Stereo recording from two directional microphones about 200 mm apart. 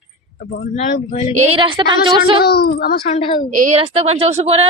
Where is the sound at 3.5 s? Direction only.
40° right (ahead or behind).